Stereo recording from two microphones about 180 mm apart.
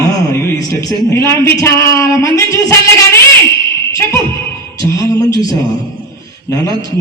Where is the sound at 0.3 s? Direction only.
15° left (ahead or behind).